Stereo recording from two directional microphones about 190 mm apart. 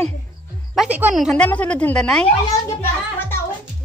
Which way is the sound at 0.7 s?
5° right (ahead or behind).